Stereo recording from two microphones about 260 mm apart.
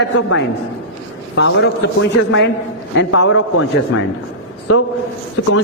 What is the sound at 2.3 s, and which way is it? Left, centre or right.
A man's voice, left.